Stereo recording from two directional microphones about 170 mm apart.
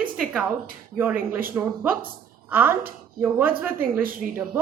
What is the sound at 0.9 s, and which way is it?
A woman's voice, 10° right (ahead or behind).